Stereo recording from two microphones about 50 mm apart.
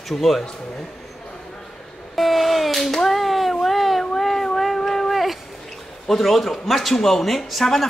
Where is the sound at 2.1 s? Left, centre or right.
Centre.